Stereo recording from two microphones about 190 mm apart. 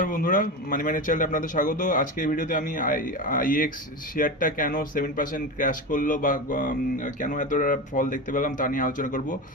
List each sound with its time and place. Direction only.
0.0 s speech: 45° left (ahead or behind)